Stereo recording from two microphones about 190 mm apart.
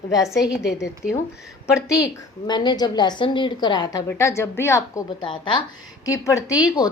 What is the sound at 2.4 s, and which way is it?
A woman's voice, 25° left (ahead or behind).